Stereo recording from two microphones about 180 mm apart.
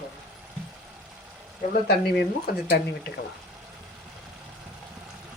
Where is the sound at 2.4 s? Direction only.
60° left (ahead or behind).